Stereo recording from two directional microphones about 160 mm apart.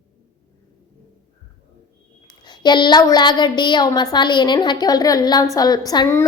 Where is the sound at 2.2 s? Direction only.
25° left (ahead or behind).